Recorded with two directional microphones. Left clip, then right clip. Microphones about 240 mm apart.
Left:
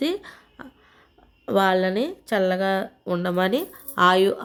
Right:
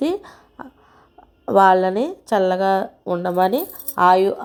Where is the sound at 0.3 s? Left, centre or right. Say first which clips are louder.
Right 5 dB; centre.